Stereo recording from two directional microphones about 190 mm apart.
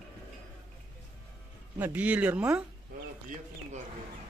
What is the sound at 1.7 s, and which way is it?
Speech, 10° right (ahead or behind).